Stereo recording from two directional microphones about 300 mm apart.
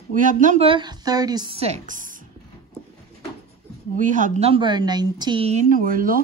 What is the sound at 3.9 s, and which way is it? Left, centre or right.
A woman's voice, right.